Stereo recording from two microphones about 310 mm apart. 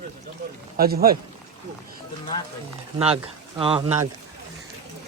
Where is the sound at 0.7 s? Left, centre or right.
Right.